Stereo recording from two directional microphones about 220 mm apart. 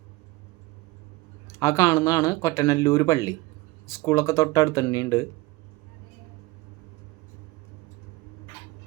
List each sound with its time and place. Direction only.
1.5 s speech: 15° left (ahead or behind)